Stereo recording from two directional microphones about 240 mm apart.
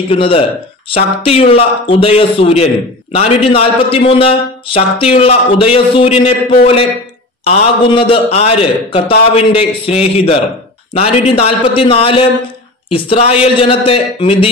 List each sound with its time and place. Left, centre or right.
0.1 s a man's voice: left